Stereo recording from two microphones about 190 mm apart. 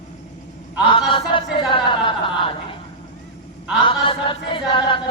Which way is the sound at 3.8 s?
25° left (ahead or behind).